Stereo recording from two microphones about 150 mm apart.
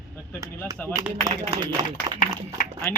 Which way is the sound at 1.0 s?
20° right (ahead or behind).